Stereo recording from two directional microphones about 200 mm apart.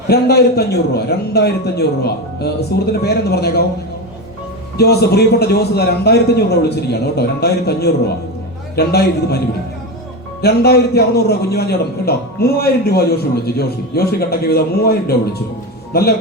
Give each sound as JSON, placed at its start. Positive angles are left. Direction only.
{"t": 0.1, "sound": "a man's voice", "side_deg": 55}
{"t": 4.8, "sound": "a man's voice", "side_deg": 55}
{"t": 10.4, "sound": "a man's voice", "side_deg": 55}